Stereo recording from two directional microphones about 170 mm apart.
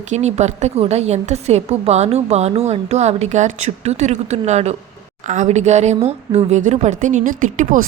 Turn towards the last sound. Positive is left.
turn(degrees=-45)  # may be behind; listen again after turning